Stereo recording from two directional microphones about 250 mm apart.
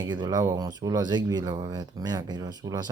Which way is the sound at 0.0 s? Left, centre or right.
Centre.